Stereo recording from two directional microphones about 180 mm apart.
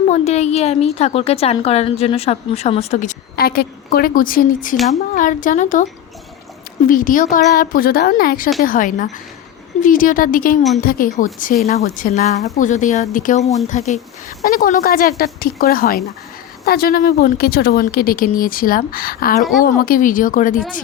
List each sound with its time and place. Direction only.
0.1 s a woman's voice: 40° left (ahead or behind)
14.4 s speech: 55° left (ahead or behind)